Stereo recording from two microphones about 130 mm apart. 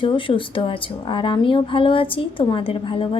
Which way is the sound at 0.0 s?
40° left (ahead or behind).